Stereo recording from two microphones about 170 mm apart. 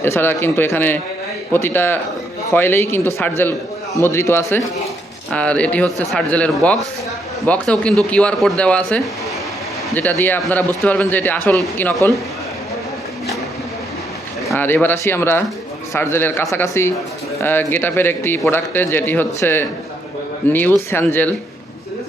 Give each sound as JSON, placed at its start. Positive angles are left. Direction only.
{"t": 0.0, "sound": "a man's voice", "side_deg": 15}
{"t": 14.5, "sound": "a man's voice", "side_deg": 10}